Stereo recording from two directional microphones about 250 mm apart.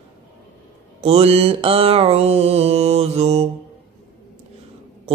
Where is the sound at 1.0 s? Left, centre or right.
Right.